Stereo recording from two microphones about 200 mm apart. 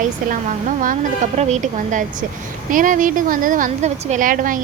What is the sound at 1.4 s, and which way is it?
A woman's voice, 35° right (ahead or behind).